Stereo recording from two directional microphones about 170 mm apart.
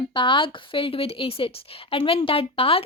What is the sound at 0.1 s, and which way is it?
Speech, 30° left (ahead or behind).